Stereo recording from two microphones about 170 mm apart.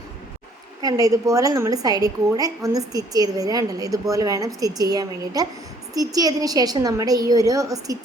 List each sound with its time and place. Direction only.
0.8 s a woman's voice: 20° right (ahead or behind)